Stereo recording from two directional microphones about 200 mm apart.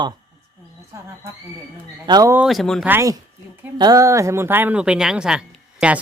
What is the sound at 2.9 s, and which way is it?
Speech, 15° right (ahead or behind).